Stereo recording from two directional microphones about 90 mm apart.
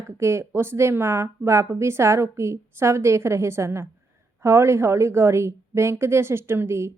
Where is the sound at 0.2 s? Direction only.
30° right (ahead or behind).